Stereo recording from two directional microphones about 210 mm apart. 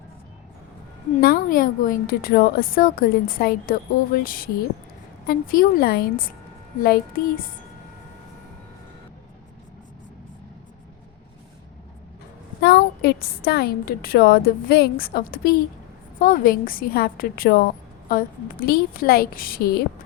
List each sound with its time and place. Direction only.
1.2 s a woman's voice: 45° left (ahead or behind)
12.6 s a woman's voice: 50° left (ahead or behind)